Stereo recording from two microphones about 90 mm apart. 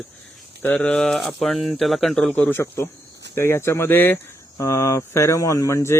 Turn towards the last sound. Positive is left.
turn(degrees=35)  # may be behind; listen again after turning